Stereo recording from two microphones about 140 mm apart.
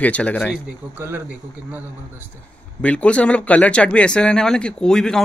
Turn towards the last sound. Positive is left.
turn(degrees=5)  # may be behind; listen again after turning